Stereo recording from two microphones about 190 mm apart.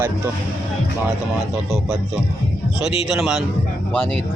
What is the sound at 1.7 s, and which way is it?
Speech, 5° right (ahead or behind).